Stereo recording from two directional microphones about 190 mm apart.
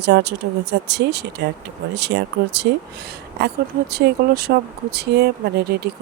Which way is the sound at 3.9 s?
55° right (ahead or behind).